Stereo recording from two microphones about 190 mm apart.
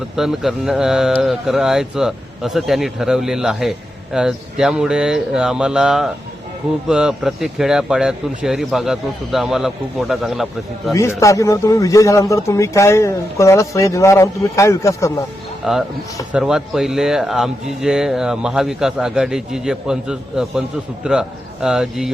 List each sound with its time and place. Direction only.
0.2 s mantra: centre (ahead or behind)
11.2 s speech: 15° left (ahead or behind)
15.6 s mantra: centre (ahead or behind)